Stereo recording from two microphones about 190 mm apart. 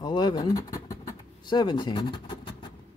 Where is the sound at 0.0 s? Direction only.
20° left (ahead or behind).